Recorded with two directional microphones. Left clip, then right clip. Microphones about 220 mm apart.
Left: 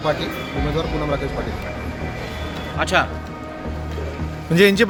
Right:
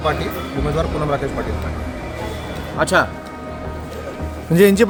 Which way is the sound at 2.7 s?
40° right (ahead or behind).